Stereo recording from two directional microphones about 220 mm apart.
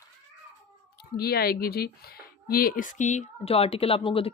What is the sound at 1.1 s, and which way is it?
Speech, 45° left (ahead or behind).